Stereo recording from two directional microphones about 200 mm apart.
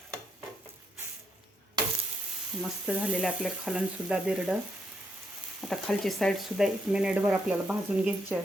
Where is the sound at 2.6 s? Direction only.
5° right (ahead or behind).